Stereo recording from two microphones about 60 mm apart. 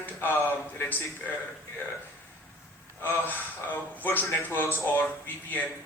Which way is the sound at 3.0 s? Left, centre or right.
Left.